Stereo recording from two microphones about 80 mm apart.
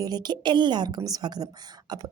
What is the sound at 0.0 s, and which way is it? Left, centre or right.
A woman's voice, right.